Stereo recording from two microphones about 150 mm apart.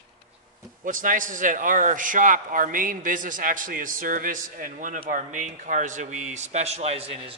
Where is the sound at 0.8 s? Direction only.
65° right (ahead or behind); by 7.2 s 40° right (ahead or behind).